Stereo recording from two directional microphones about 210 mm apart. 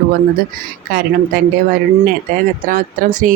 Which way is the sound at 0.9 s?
45° right (ahead or behind).